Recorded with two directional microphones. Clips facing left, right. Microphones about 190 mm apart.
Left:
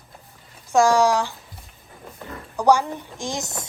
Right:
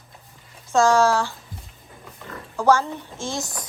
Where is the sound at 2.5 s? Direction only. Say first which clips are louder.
Left 1 dB; 15° left (ahead or behind).